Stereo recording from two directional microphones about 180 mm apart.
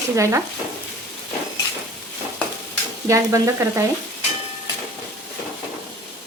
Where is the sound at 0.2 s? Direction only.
15° right (ahead or behind).